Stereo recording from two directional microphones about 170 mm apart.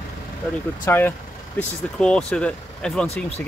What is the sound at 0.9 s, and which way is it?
Speech, 10° left (ahead or behind).